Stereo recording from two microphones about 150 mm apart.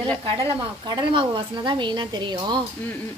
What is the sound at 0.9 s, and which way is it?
Speech, 35° right (ahead or behind).